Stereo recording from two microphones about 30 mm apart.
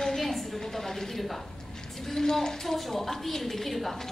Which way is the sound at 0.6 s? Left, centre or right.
Centre.